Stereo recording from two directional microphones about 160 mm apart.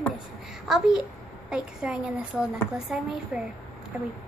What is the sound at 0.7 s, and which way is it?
A woman's voice, 5° right (ahead or behind).